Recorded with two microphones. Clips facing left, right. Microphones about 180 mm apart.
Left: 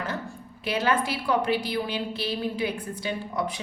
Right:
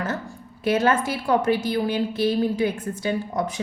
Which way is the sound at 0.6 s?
45° right (ahead or behind).